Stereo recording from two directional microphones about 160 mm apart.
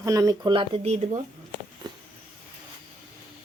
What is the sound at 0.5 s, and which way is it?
Speech, 35° right (ahead or behind).